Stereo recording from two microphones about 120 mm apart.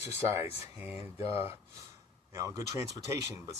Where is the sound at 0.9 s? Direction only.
60° left (ahead or behind).